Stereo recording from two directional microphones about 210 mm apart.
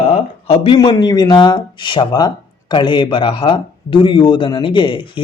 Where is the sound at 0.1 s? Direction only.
30° left (ahead or behind).